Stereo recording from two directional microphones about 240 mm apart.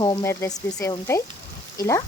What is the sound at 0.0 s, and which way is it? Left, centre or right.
Speech, centre.